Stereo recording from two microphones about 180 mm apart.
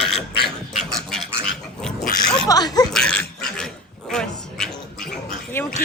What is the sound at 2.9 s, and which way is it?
Dog, 5° left (ahead or behind).